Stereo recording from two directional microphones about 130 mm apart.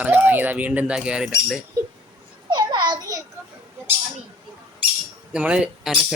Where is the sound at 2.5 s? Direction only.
35° right (ahead or behind).